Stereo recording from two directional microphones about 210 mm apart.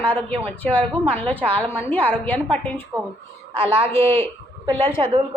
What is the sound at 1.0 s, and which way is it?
Speech, 30° right (ahead or behind).